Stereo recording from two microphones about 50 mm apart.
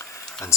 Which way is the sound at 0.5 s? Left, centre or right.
Left.